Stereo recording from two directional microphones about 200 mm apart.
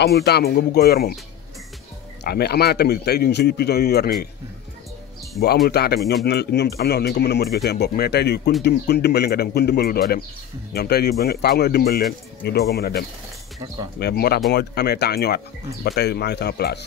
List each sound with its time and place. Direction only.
0.0 s speech: 55° left (ahead or behind)
2.2 s speech: 50° left (ahead or behind)
5.7 s speech: 55° left (ahead or behind)